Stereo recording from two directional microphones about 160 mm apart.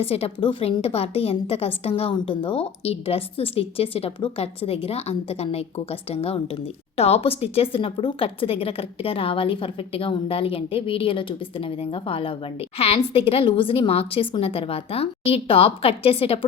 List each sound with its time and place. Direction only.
0.0 s a woman's voice: 40° left (ahead or behind)